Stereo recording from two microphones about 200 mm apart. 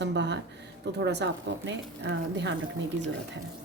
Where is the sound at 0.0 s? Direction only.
60° right (ahead or behind).